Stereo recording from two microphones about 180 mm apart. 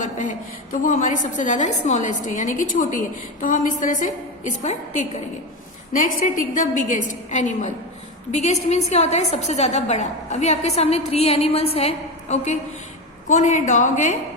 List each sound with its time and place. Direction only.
0.0 s a woman's voice: 45° left (ahead or behind)
6.2 s a woman's voice: 45° left (ahead or behind)